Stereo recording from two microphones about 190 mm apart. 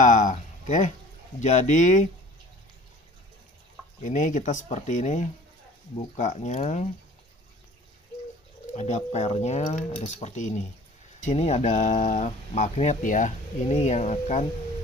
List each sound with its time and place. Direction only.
0.0 s speech: 40° left (ahead or behind)
4.0 s speech: 40° left (ahead or behind)
8.7 s speech: 35° left (ahead or behind)